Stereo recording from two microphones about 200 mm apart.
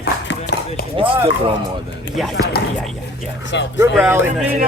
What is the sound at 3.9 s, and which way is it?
Speech, 10° right (ahead or behind).